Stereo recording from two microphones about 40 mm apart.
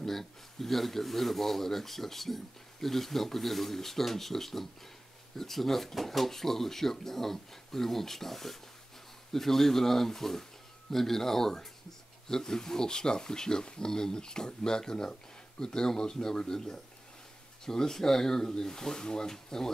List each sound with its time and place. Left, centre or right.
0.0 s speech: centre